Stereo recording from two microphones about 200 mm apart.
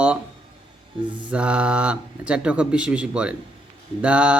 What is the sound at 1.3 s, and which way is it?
Speech, 5° right (ahead or behind).